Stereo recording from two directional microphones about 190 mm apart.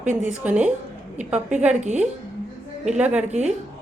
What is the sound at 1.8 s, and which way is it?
Speech, 40° right (ahead or behind).